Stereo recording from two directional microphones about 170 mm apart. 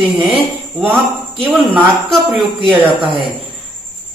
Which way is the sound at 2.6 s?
30° right (ahead or behind).